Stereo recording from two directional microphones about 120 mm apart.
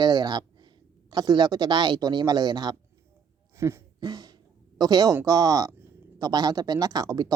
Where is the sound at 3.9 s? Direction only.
35° right (ahead or behind).